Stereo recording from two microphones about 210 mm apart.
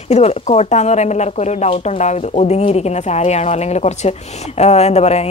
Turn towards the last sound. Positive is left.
turn(degrees=30)  # may be behind; listen again after turning